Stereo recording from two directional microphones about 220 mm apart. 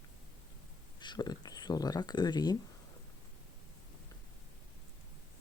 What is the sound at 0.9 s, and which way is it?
Speech, 20° left (ahead or behind).